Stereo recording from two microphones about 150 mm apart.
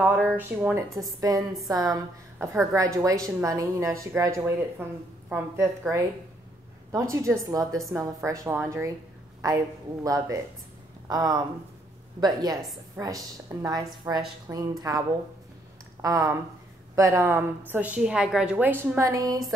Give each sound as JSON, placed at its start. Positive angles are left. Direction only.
{"t": 0.0, "sound": "a woman's voice", "side_deg": -10}